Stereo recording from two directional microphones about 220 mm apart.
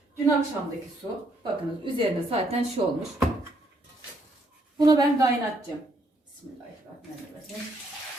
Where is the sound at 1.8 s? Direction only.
25° right (ahead or behind).